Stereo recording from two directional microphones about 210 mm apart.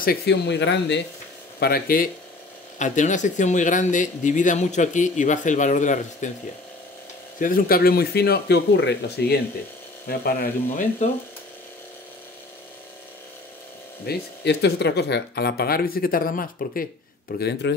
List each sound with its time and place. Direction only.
0.0 s speech: 50° left (ahead or behind)
1.6 s speech: 45° left (ahead or behind)
7.3 s speech: 40° left (ahead or behind)
14.0 s speech: 55° left (ahead or behind)
17.4 s speech: 55° left (ahead or behind)